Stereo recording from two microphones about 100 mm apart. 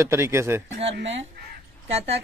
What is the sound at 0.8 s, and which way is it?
Speech, 90° right.